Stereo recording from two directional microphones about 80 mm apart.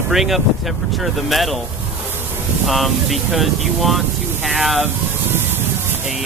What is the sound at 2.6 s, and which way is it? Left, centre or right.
Speech, centre.